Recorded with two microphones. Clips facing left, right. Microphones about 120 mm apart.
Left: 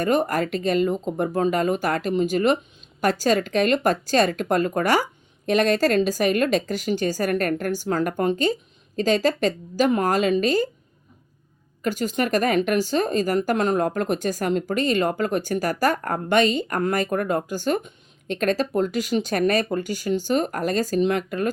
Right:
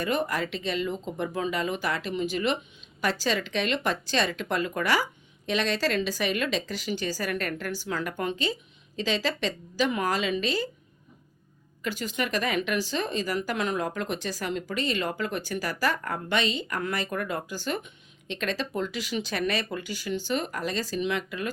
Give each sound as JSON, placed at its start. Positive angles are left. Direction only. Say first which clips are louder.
{"t": 0.0, "sound": "speech", "louder": "left 6 dB", "side_deg": 45}
{"t": 11.8, "sound": "speech", "louder": "left 7 dB", "side_deg": 45}